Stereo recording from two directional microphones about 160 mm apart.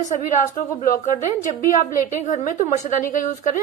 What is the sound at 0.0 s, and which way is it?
A woman's voice, 50° left (ahead or behind).